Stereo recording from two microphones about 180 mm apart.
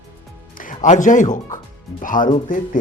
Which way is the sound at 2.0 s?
45° left (ahead or behind).